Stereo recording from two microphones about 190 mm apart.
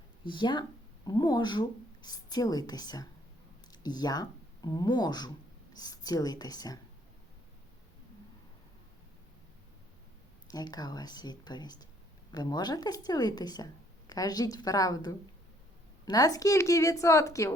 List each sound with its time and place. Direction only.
0.3 s a woman's voice: 25° left (ahead or behind)
10.5 s a woman's voice: 20° left (ahead or behind)